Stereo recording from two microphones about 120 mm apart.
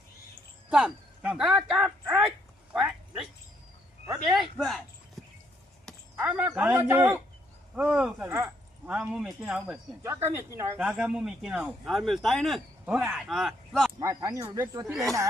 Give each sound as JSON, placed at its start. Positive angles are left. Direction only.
{"t": 0.7, "sound": "speech", "side_deg": -5}
{"t": 2.7, "sound": "a sound", "side_deg": -5}
{"t": 4.1, "sound": "speech", "side_deg": -5}
{"t": 6.1, "sound": "speech", "side_deg": -10}
{"t": 7.8, "sound": "speech", "side_deg": -5}
{"t": 10.0, "sound": "speech", "side_deg": -20}
{"t": 10.8, "sound": "speech", "side_deg": -10}
{"t": 14.0, "sound": "speech", "side_deg": -25}